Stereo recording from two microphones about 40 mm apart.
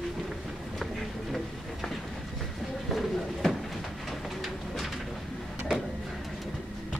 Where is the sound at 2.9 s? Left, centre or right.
Centre.